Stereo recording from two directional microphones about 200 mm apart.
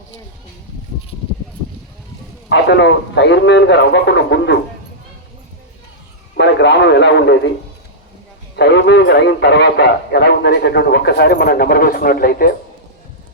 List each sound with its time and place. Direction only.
2.5 s a man's voice: 60° left (ahead or behind)
6.3 s a man's voice: 60° left (ahead or behind)
8.5 s a man's voice: 60° left (ahead or behind)